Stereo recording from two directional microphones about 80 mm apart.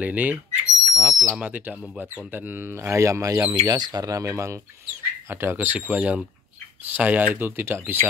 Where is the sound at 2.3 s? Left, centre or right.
Right.